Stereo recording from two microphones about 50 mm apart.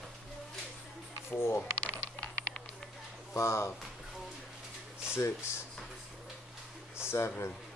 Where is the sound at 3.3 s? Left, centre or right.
Left.